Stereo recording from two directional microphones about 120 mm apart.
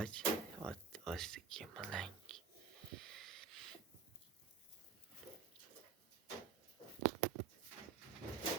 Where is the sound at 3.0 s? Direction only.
5° left (ahead or behind).